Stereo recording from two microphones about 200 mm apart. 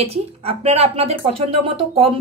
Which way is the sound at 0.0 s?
30° right (ahead or behind).